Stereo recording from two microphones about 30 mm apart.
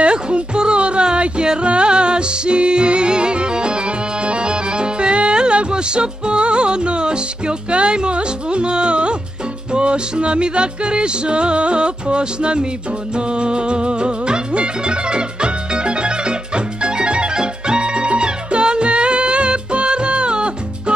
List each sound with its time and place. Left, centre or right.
0.0 s music: right